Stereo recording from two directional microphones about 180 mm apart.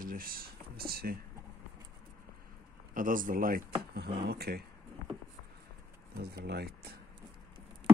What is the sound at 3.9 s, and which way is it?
Speech, 60° right (ahead or behind).